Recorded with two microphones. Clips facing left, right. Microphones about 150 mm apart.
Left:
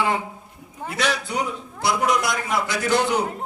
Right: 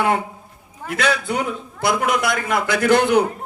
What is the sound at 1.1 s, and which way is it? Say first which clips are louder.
Speech: right 3 dB; 55° right (ahead or behind).